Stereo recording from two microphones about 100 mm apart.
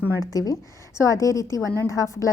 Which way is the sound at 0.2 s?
40° left (ahead or behind).